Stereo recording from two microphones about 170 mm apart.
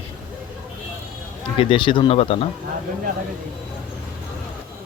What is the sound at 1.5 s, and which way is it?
Speech, 30° left (ahead or behind).